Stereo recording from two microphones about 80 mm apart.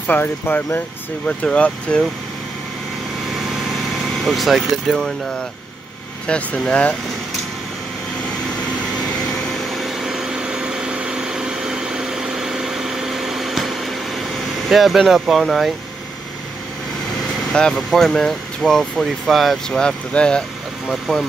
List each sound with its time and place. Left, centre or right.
0.0 s speech: left
1.2 s speech: centre
4.2 s speech: centre
6.2 s speech: centre
9.5 s vehicle: centre
14.7 s speech: centre
17.5 s speech: centre